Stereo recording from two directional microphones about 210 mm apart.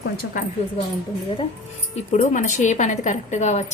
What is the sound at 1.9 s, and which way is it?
A woman's voice, 35° left (ahead or behind).